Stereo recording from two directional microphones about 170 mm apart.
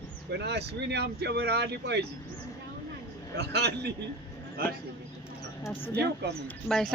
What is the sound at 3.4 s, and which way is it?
Speech, 80° right.